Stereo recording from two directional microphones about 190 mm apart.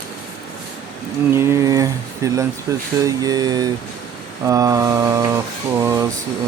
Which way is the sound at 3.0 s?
20° right (ahead or behind).